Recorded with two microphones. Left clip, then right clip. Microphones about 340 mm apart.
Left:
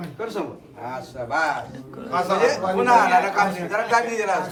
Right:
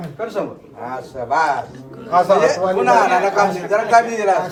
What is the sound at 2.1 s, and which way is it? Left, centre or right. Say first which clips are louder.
A man's voice: right 7 dB; centre.